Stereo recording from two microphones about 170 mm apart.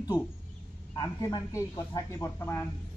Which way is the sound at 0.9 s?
20° left (ahead or behind).